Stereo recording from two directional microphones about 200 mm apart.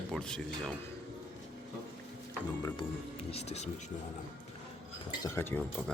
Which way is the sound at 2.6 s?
25° left (ahead or behind).